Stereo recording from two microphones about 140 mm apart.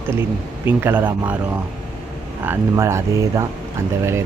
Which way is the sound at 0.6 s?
15° right (ahead or behind).